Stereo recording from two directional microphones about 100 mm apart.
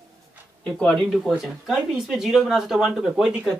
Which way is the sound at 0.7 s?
5° left (ahead or behind).